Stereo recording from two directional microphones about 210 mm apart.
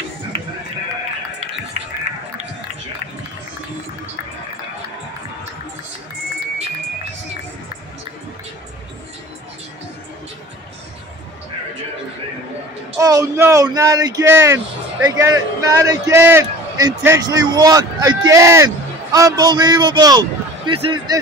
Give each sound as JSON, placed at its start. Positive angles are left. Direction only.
{"t": 13.0, "sound": "a man's voice", "side_deg": -15}